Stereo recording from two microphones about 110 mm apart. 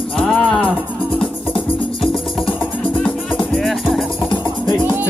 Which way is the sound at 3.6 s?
Centre (ahead or behind).